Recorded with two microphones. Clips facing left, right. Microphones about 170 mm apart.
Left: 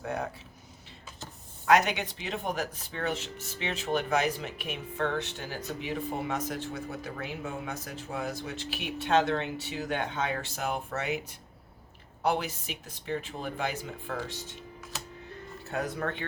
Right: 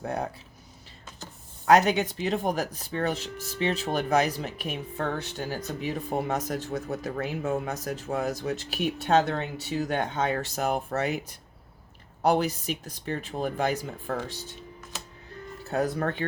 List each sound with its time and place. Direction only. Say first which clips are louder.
0.0 s speech: right 3 dB; 35° right (ahead or behind)
1.9 s speech: right 8 dB; 40° right (ahead or behind)
15.7 s speech: right 5 dB; 40° right (ahead or behind)